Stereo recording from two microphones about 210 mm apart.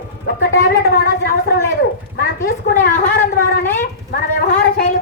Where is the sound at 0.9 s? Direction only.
50° left (ahead or behind).